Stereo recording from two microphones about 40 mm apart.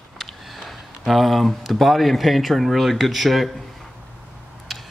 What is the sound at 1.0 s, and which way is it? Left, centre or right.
Speech, centre.